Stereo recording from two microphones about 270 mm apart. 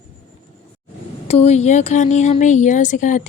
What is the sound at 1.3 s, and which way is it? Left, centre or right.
Speech, left.